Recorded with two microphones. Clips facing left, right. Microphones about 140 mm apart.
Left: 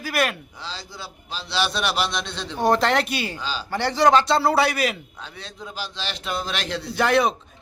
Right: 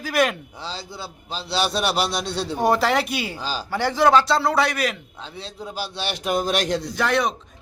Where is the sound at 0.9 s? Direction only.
30° right (ahead or behind).